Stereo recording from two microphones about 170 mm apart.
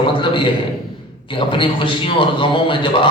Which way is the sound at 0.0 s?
30° left (ahead or behind).